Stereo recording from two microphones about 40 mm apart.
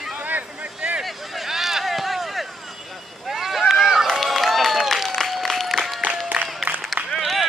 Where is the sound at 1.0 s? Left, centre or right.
Centre.